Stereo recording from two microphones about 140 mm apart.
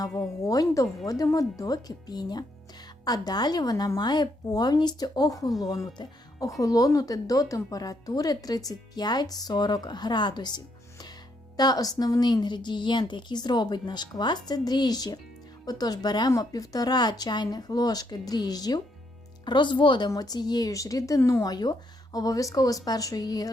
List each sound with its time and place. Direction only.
0.0 s speech: 25° left (ahead or behind)